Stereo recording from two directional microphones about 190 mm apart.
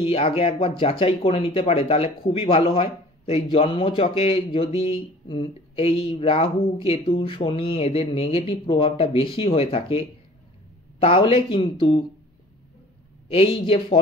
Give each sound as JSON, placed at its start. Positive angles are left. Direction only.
{"t": 0.0, "sound": "speech", "side_deg": 30}
{"t": 13.3, "sound": "speech", "side_deg": 30}